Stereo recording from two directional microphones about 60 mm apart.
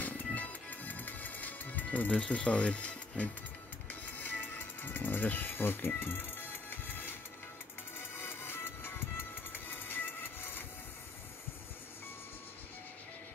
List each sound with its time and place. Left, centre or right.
0.0 s music: left
8.2 s music: left